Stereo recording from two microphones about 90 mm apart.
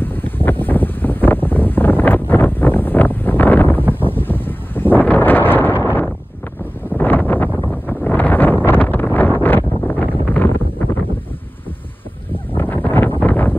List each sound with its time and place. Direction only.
0.0 s wind: 20° left (ahead or behind)
0.5 s wind noise: 20° left (ahead or behind)
6.9 s wind noise: 20° left (ahead or behind)
12.5 s a sound: 20° left (ahead or behind)